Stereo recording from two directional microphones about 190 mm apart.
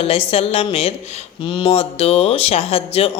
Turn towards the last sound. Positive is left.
turn(degrees=30)  # may be behind; listen again after turning